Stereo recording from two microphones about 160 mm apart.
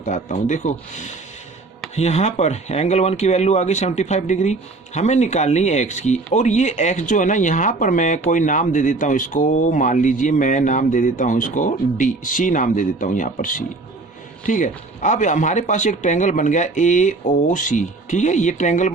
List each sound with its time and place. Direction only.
0.0 s speech: 50° left (ahead or behind)